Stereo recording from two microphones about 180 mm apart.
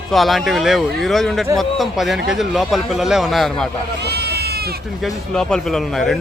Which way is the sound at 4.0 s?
65° right (ahead or behind).